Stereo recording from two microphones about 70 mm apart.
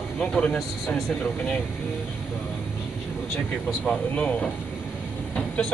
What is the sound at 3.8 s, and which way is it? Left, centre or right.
Speech, centre.